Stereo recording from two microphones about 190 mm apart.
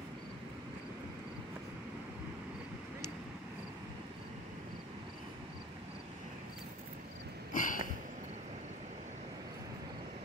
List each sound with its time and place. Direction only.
7.5 s sniff: 45° left (ahead or behind)